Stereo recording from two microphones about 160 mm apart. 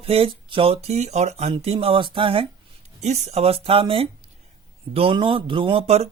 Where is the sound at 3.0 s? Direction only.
45° right (ahead or behind).